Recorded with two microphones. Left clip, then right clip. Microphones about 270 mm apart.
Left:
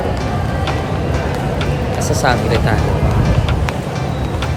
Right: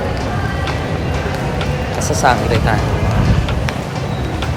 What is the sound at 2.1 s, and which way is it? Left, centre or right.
Speech, centre.